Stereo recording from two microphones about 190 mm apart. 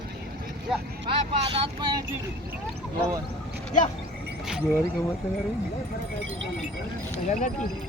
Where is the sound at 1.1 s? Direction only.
30° right (ahead or behind).